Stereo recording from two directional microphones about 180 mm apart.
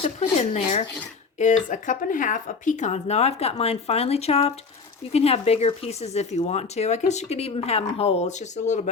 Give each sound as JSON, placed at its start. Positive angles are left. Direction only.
{"t": 0.0, "sound": "speech", "side_deg": 40}